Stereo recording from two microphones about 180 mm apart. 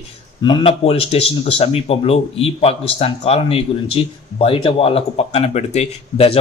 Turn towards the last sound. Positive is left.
turn(degrees=35)  # may be behind; listen again after turning